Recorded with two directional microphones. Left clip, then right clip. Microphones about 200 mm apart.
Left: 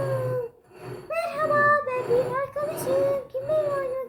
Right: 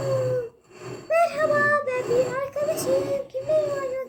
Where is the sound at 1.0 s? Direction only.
10° left (ahead or behind).